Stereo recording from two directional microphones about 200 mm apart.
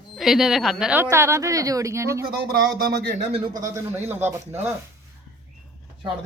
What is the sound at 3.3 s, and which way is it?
Speech, 25° right (ahead or behind).